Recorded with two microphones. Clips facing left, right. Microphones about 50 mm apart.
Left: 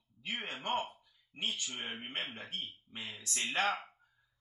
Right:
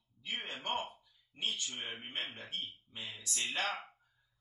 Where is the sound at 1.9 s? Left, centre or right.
Left.